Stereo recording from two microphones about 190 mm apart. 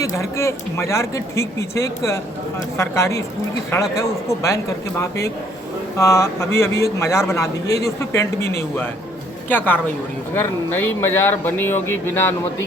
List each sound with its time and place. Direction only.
0.0 s speech: 15° left (ahead or behind)